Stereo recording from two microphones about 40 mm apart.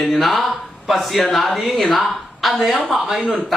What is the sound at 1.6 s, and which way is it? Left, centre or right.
Speech, centre.